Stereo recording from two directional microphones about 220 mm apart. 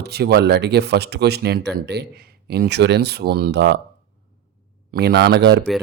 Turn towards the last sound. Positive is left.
turn(degrees=-50)  # may be behind; listen again after turning